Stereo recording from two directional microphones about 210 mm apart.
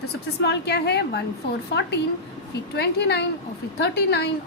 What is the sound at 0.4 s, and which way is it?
Speech, 55° left (ahead or behind).